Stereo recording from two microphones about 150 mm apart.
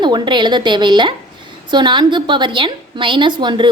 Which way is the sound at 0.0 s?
30° right (ahead or behind).